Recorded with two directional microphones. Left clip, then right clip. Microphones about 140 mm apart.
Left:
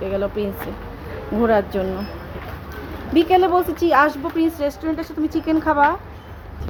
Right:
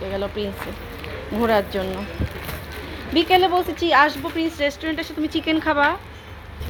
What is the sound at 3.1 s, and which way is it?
A woman's voice, 10° left (ahead or behind).